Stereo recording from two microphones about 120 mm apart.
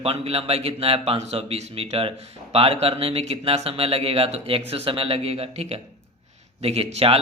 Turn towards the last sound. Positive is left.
turn(degrees=-55)  # may be behind; listen again after turning